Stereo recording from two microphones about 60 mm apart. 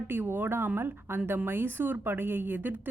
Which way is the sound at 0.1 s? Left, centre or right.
Right.